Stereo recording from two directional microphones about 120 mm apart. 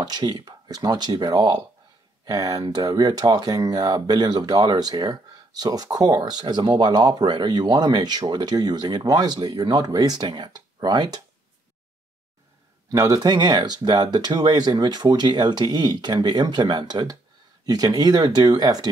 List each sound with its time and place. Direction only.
0.0 s speech: 35° right (ahead or behind)
12.9 s speech: 30° right (ahead or behind)